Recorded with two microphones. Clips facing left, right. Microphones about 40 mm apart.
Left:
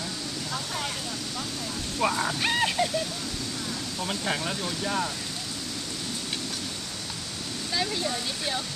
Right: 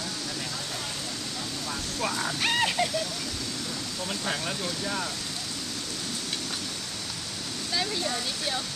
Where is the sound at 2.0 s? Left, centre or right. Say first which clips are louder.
Left 5 dB; left.